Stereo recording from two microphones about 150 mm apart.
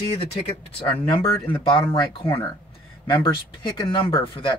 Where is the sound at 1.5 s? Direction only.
35° left (ahead or behind).